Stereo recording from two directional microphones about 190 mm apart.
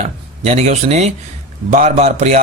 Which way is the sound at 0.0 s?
35° right (ahead or behind).